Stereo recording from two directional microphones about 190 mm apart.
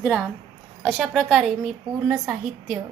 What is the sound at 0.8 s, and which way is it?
A woman's voice, centre (ahead or behind).